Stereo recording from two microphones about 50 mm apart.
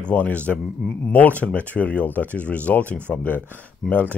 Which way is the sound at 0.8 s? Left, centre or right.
Centre.